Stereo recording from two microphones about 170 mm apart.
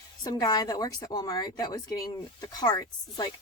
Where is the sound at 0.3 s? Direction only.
25° left (ahead or behind).